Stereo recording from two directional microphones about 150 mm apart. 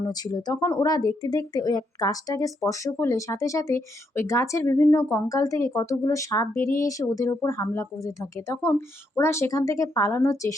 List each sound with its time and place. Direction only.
0.0 s speech: 25° left (ahead or behind)